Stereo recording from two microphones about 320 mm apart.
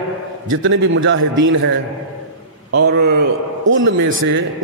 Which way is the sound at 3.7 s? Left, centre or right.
Right.